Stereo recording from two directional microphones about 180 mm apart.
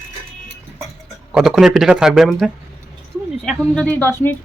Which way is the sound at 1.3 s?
Centre (ahead or behind).